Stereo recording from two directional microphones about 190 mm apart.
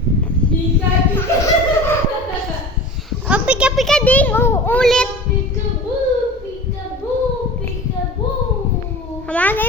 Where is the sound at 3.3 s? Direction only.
5° right (ahead or behind).